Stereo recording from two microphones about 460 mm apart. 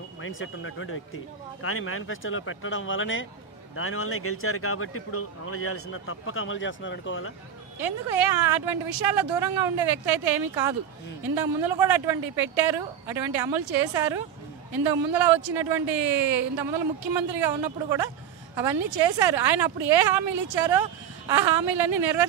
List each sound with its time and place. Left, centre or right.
0.2 s speech: left
7.8 s speech: right